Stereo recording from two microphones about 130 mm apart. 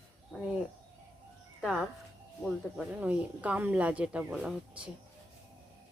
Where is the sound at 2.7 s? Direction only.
5° right (ahead or behind).